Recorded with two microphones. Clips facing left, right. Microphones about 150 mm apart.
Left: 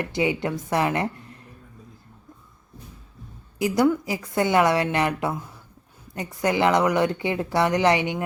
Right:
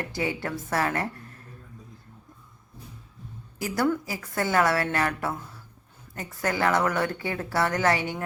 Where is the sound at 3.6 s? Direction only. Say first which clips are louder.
Left 5 dB; 15° left (ahead or behind).